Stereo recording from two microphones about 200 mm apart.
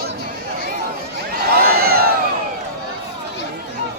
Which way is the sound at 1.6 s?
50° right (ahead or behind).